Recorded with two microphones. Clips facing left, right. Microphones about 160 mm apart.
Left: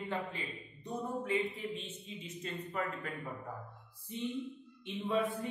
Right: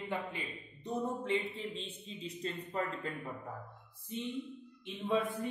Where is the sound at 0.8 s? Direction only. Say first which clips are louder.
Right 2 dB; 25° right (ahead or behind).